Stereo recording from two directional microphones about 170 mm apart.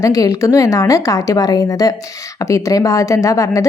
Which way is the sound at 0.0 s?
20° left (ahead or behind).